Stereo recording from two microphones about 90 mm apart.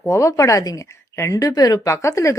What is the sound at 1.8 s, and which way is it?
Speech, 35° left (ahead or behind).